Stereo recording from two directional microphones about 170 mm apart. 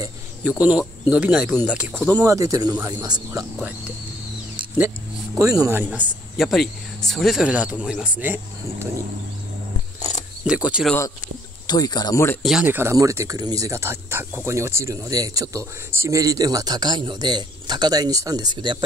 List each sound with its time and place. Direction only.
0.4 s speech: 10° right (ahead or behind)
2.0 s speech: 20° right (ahead or behind)
4.7 s speech: 10° right (ahead or behind)
5.9 s speech: centre (ahead or behind)
9.9 s wild animals: 45° left (ahead or behind)
10.4 s speech: 5° right (ahead or behind)
11.6 s speech: 25° left (ahead or behind)
12.4 s speech: 5° right (ahead or behind); by 18.8 s 25° right (ahead or behind)